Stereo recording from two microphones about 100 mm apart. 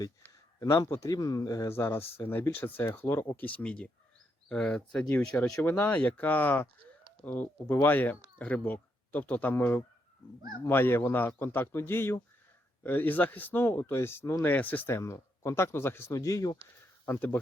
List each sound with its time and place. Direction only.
0.6 s a man's voice: 35° left (ahead or behind)
17.1 s speech: 20° left (ahead or behind)